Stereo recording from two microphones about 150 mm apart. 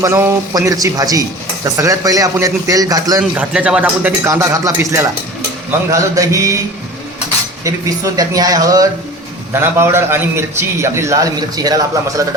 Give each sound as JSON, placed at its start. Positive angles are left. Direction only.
{"t": 0.0, "sound": "a man's voice", "side_deg": -15}
{"t": 3.3, "sound": "a man's voice", "side_deg": -5}
{"t": 7.6, "sound": "a man's voice", "side_deg": -25}